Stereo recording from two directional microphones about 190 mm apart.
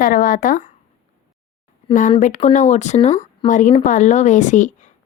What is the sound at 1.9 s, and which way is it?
Speech, 40° left (ahead or behind).